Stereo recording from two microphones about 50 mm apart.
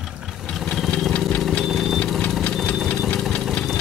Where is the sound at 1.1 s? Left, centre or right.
Left.